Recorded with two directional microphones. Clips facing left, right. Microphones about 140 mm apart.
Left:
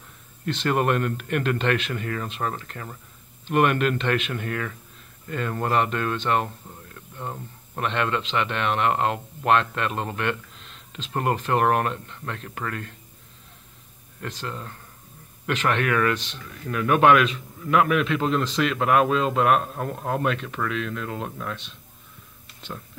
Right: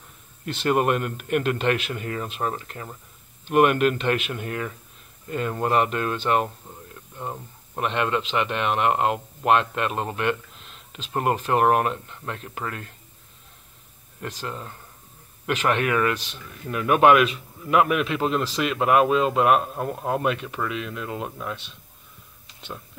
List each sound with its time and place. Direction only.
0.5 s a man's voice: 10° right (ahead or behind)
14.2 s a man's voice: 10° right (ahead or behind)